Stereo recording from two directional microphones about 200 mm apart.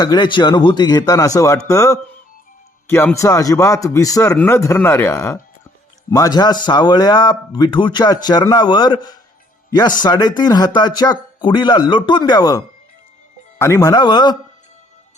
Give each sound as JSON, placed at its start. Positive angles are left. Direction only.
{"t": 0.0, "sound": "speech", "side_deg": 20}